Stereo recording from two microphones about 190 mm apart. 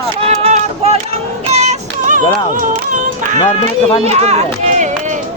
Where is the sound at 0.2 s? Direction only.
35° right (ahead or behind).